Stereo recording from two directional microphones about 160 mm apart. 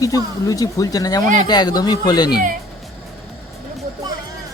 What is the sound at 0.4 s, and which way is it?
Speech, 20° left (ahead or behind).